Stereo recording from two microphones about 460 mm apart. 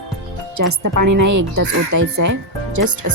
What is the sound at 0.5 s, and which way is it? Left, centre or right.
Speech, right.